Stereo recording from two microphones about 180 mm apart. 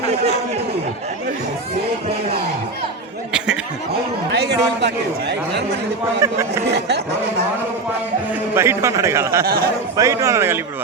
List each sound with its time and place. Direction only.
3.3 s a sound: 5° right (ahead or behind)
4.3 s chatter: 70° right (ahead or behind)
6.7 s speech: 70° right (ahead or behind)
8.5 s a man's voice: 15° right (ahead or behind)
9.4 s a man's voice: 55° right (ahead or behind)
10.0 s a man's voice: 15° right (ahead or behind)